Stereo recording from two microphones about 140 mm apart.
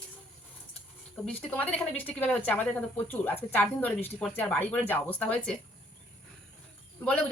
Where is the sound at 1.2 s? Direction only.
10° left (ahead or behind).